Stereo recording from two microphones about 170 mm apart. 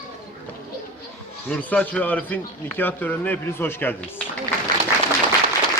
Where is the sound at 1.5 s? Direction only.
10° left (ahead or behind).